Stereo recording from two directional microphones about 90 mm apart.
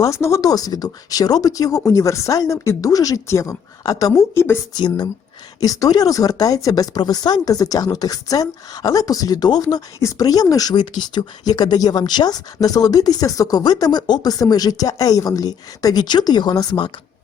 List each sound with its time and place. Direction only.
0.0 s speech: 30° left (ahead or behind)
5.5 s speech: 40° left (ahead or behind); by 16.9 s 60° left (ahead or behind)